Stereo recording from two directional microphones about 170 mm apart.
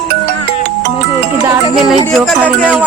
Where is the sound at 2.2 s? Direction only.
5° right (ahead or behind).